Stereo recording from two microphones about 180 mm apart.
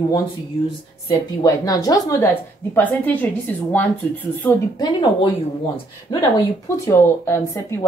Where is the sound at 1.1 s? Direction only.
20° left (ahead or behind).